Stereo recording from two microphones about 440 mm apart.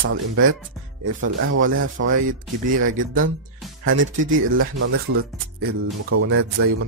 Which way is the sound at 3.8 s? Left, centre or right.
Right.